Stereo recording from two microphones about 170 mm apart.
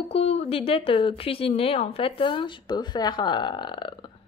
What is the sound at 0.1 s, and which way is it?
A woman's voice, 35° left (ahead or behind).